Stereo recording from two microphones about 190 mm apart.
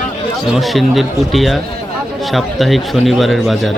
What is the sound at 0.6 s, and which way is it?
Speech, centre (ahead or behind).